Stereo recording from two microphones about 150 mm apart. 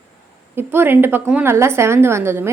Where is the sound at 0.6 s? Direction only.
15° right (ahead or behind).